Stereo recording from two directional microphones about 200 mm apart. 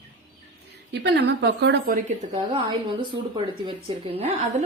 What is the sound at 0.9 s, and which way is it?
Speech, 55° right (ahead or behind).